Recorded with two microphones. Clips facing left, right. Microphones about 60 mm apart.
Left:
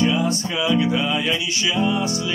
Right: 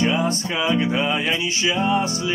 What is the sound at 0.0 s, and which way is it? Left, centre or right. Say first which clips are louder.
Music: left 1 dB; right.